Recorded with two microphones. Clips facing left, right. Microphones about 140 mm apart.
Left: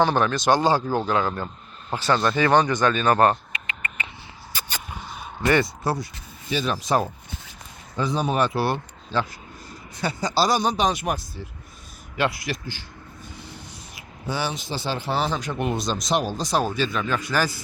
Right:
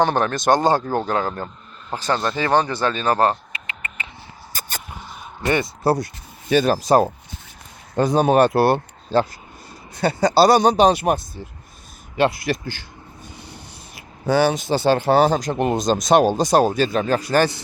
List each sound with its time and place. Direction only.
0.0 s speech: 45° right (ahead or behind); by 4.0 s 30° right (ahead or behind)
4.5 s a sound: 45° right (ahead or behind)
5.5 s speech: 25° right (ahead or behind)
6.5 s speech: 55° right (ahead or behind)
6.7 s speech: 40° right (ahead or behind)
7.9 s speech: 50° right (ahead or behind)
9.9 s speech: 60° right (ahead or behind)
10.8 s speech: 35° right (ahead or behind)
12.3 s speech: 60° right (ahead or behind)
14.3 s speech: 45° right (ahead or behind)
16.2 s speech: 55° right (ahead or behind); by 17.3 s 35° right (ahead or behind)
17.3 s speech: 65° right (ahead or behind)